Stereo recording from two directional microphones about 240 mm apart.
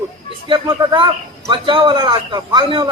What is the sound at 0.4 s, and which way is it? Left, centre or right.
A man's voice, right.